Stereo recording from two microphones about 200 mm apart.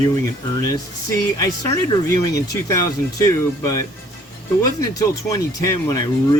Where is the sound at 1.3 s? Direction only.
15° left (ahead or behind).